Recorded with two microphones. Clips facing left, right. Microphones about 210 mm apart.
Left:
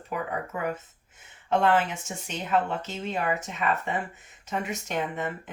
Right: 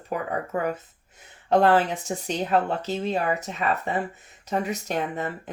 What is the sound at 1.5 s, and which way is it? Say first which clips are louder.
Speech: right 4 dB; 35° right (ahead or behind).